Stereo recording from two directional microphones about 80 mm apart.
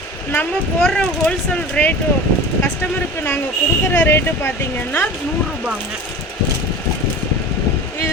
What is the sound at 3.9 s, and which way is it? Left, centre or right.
Speech, left.